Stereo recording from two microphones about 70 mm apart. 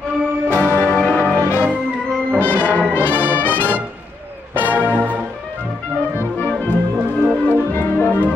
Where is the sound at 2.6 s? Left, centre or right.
Left.